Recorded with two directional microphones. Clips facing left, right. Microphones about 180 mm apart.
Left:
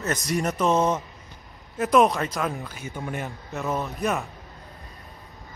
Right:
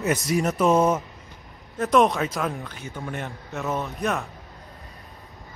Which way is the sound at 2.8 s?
15° left (ahead or behind).